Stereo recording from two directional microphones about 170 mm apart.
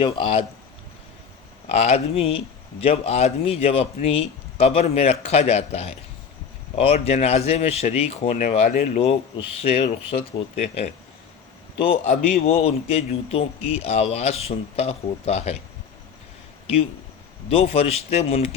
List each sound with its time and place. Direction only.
0.0 s speech: 30° left (ahead or behind)
1.6 s a man's voice: 35° left (ahead or behind)
12.0 s a man's voice: 40° left (ahead or behind)
17.5 s a man's voice: 35° left (ahead or behind)